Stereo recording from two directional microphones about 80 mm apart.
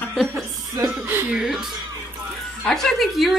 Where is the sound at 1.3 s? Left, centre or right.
Centre.